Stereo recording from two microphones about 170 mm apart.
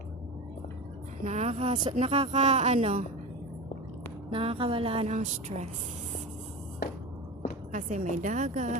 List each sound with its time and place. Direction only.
1.2 s speech: 40° right (ahead or behind)
4.3 s speech: 30° right (ahead or behind)
7.7 s a woman's voice: 50° right (ahead or behind)